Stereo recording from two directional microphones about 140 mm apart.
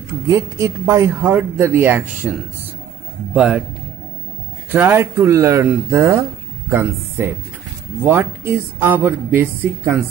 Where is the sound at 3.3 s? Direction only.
10° right (ahead or behind).